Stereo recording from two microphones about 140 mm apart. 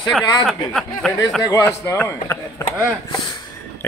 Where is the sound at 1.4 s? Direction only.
25° left (ahead or behind).